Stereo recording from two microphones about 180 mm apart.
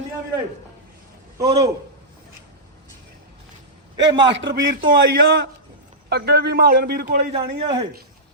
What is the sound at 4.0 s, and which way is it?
Speech, 90° right.